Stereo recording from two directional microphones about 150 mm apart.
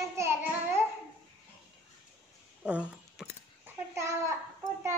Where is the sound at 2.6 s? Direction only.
5° right (ahead or behind).